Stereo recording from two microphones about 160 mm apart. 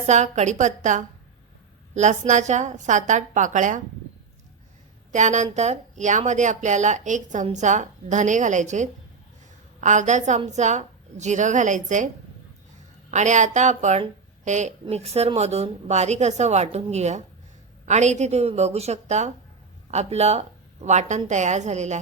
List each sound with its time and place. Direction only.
0.0 s a woman's voice: 45° right (ahead or behind)
5.1 s a woman's voice: 50° right (ahead or behind)
13.1 s a woman's voice: 50° right (ahead or behind)